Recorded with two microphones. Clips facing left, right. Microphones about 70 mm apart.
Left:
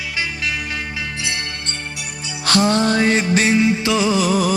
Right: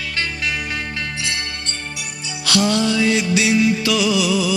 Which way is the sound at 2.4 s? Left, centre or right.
Left.